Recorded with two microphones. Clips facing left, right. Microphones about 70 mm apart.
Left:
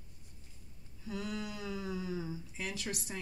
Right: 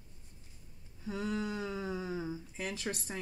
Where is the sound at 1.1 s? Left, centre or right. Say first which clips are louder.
Right 4 dB; right.